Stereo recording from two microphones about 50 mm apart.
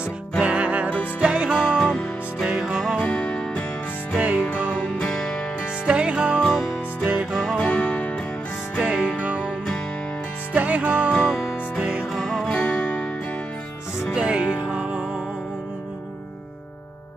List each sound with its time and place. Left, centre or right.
0.4 s music: right
1.8 s music: centre
3.0 s music: centre
4.2 s music: right
4.9 s music: centre
5.9 s music: right
6.6 s music: centre
7.5 s music: centre
8.8 s music: centre
10.5 s music: right
12.1 s music: centre
12.4 s music: centre
14.1 s music: centre